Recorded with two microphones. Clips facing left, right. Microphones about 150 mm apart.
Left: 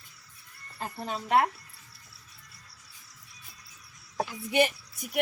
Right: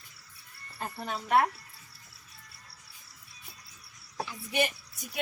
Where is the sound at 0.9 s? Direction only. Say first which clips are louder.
Left 1 dB; 20° left (ahead or behind).